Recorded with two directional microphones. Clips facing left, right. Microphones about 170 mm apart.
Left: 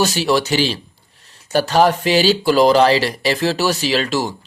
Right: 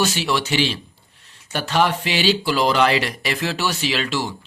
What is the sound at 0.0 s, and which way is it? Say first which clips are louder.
Speech: left 5 dB; 40° left (ahead or behind).